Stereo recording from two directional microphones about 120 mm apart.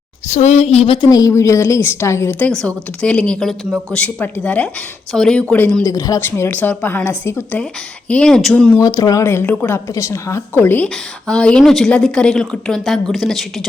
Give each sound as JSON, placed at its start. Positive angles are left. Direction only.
{"t": 0.3, "sound": "a woman's voice", "side_deg": 75}
{"t": 1.0, "sound": "a woman's voice", "side_deg": 30}
{"t": 2.4, "sound": "speech", "side_deg": 10}
{"t": 5.9, "sound": "a woman's voice", "side_deg": 30}
{"t": 8.8, "sound": "a woman's voice", "side_deg": 30}
{"t": 10.8, "sound": "a woman's voice", "side_deg": 5}